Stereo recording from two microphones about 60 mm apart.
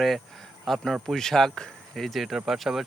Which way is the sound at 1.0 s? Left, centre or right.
Centre.